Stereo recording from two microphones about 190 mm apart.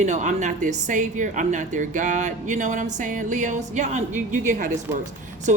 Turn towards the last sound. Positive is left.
turn(degrees=-40)  # may be behind; listen again after turning